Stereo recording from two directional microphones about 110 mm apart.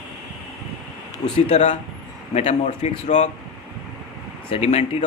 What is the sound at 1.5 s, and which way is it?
A man's voice, 90° left.